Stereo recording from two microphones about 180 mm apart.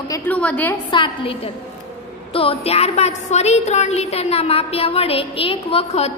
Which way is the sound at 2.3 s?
30° left (ahead or behind).